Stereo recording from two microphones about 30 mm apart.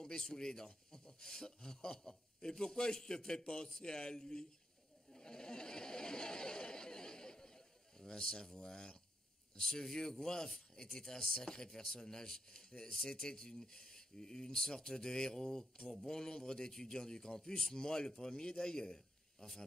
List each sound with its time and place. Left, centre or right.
0.0 s speech: left
5.1 s a sound: left
8.5 s speech: left